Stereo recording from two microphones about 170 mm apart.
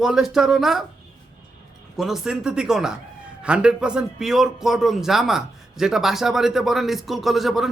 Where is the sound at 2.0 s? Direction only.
Centre (ahead or behind).